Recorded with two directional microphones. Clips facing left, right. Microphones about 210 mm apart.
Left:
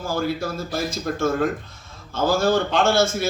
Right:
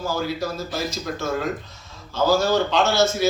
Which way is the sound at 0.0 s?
50° left (ahead or behind).